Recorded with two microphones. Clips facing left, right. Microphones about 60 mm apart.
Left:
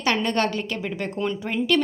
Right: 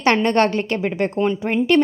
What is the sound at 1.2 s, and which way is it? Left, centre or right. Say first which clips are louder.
Speech: right 5 dB; right.